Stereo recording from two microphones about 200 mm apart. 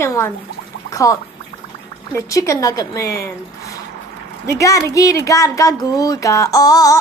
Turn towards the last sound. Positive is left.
turn(degrees=20)  # may be behind; listen again after turning